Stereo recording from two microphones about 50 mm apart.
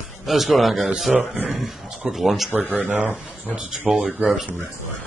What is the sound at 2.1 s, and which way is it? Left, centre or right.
Speech, centre.